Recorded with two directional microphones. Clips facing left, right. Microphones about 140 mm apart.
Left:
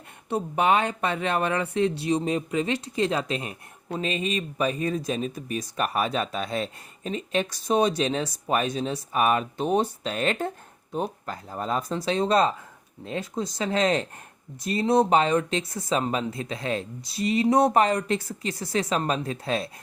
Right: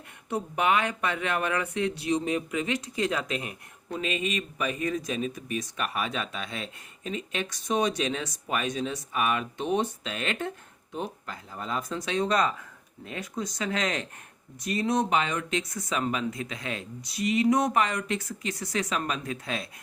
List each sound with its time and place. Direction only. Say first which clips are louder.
0.3 s speech: left 3 dB; 30° left (ahead or behind)